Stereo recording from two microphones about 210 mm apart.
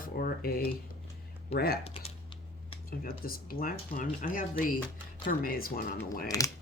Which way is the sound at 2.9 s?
45° left (ahead or behind).